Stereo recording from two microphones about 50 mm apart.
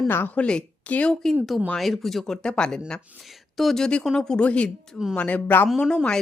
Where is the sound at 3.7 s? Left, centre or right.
Centre; by 5.6 s left.